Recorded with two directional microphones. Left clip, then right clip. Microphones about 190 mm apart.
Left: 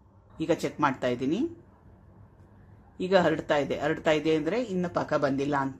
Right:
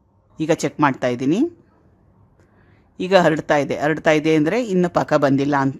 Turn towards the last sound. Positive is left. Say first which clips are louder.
# right 9 dB
turn(degrees=-35)  # may be behind; listen again after turning